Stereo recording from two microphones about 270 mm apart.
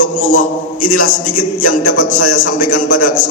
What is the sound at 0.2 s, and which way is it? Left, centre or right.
Speech, left.